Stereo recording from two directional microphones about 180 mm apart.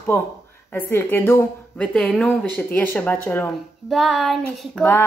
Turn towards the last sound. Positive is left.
turn(degrees=0)  # may be behind; listen again after turning